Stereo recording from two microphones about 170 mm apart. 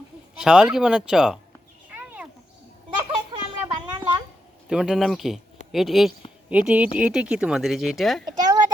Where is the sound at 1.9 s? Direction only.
10° right (ahead or behind).